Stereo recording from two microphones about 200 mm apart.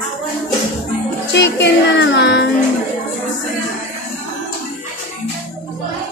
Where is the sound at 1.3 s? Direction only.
60° left (ahead or behind).